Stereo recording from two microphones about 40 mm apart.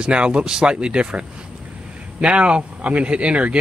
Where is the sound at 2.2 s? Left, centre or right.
Right.